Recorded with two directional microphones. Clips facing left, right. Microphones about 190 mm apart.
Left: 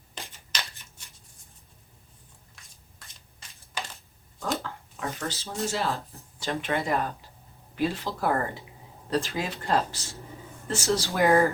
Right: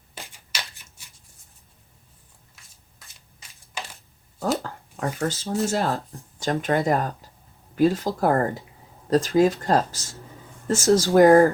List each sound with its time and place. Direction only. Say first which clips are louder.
0.1 s shuffling cards: even; 10° right (ahead or behind)
5.2 s speech: right 8 dB; 45° right (ahead or behind)